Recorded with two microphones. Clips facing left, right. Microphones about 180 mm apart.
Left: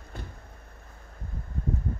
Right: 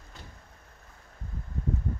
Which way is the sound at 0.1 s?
55° left (ahead or behind).